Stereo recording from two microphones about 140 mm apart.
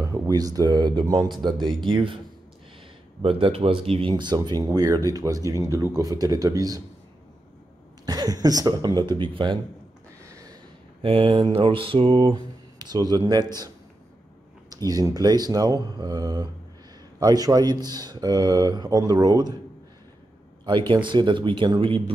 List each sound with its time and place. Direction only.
0.0 s speech: 25° right (ahead or behind)
3.2 s speech: 40° right (ahead or behind)
8.0 s speech: 25° right (ahead or behind)
11.0 s a sound: 40° right (ahead or behind)
14.7 s speech: 25° right (ahead or behind)
20.6 s a sound: 35° right (ahead or behind)